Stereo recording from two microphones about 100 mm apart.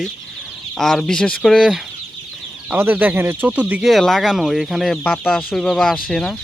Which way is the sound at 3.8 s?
Centre (ahead or behind).